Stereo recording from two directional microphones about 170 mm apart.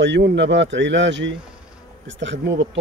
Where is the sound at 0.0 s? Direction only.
90° right.